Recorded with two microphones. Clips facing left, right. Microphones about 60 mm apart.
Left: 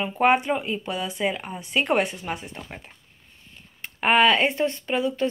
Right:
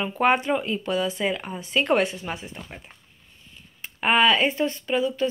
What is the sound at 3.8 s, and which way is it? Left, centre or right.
Speech, left.